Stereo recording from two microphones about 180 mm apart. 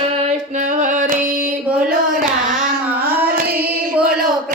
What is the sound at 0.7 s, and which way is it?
Singing, 45° right (ahead or behind).